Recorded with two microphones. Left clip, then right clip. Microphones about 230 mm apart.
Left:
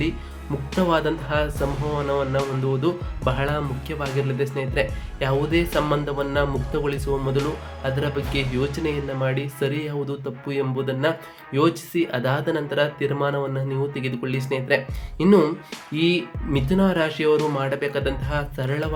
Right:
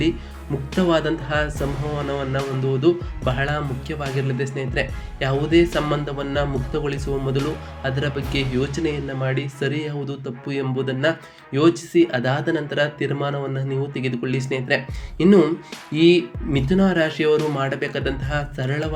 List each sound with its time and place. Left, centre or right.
0.7 s speech: centre